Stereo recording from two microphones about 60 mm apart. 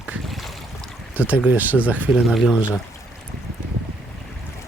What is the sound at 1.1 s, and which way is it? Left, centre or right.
Speech, right.